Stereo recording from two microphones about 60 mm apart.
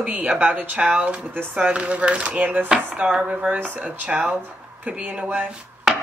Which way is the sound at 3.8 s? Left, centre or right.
Centre.